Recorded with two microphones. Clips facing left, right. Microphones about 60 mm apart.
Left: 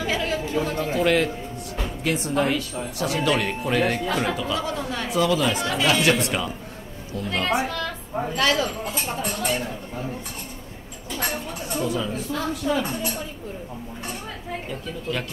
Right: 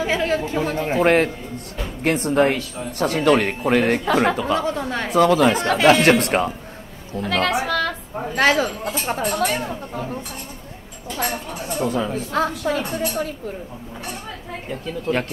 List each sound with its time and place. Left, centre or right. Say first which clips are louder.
0.0 s speech: right 4 dB; right
4.6 s speech: right 4 dB; right
7.2 s a woman's voice: right 5 dB; right
7.6 s music: right 6 dB; right
8.4 s speech: right 5 dB; right
9.3 s a woman's voice: right 5 dB; right
11.1 s speech: right 3 dB; centre
11.8 s speech: right 4 dB; right
12.1 s a woman's voice: right 5 dB; right
14.7 s speech: right 8 dB; right